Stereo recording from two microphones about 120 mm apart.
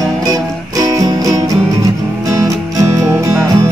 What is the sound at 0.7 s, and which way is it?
Music, 30° right (ahead or behind).